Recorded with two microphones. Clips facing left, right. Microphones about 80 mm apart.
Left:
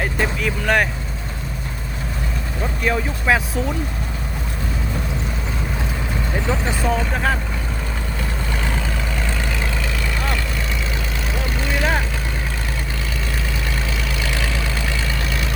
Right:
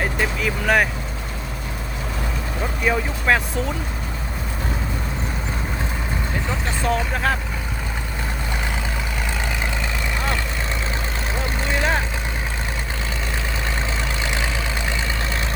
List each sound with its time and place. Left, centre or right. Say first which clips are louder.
0.0 s speech: left 1 dB; centre
2.8 s speech: even; centre
6.5 s speech: left 2 dB; centre
10.2 s vehicle: even; centre
14.3 s vehicle: even; right